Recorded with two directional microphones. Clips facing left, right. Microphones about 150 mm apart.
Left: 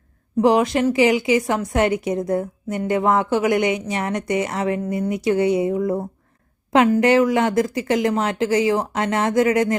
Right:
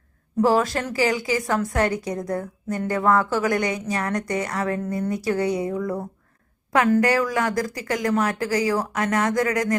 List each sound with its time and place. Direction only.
0.4 s a woman's voice: 20° left (ahead or behind)